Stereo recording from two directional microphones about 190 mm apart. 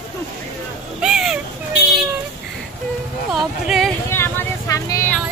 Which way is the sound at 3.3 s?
Centre (ahead or behind).